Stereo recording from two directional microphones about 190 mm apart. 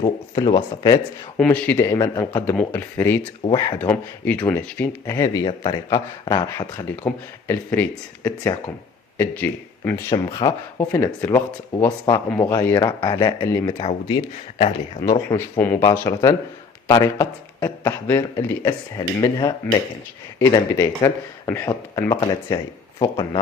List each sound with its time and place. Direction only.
0.0 s speech: 20° left (ahead or behind)
1.4 s speech: 5° left (ahead or behind)
3.4 s speech: 25° left (ahead or behind)
3.8 s speech: 10° left (ahead or behind)
6.9 s speech: 10° left (ahead or behind)
11.9 s speech: 25° left (ahead or behind)